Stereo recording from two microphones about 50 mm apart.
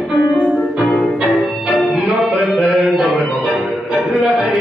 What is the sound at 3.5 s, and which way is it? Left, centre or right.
Music, right.